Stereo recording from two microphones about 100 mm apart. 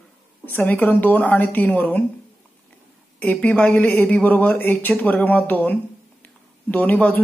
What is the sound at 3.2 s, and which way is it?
A woman's voice, 15° left (ahead or behind).